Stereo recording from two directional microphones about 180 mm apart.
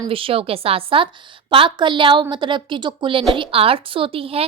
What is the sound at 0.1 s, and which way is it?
A woman's voice, 30° right (ahead or behind).